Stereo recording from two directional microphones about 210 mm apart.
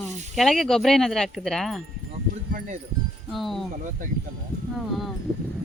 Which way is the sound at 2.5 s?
35° right (ahead or behind).